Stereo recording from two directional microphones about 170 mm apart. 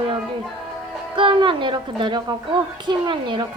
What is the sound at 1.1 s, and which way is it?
A child's voice, 30° right (ahead or behind).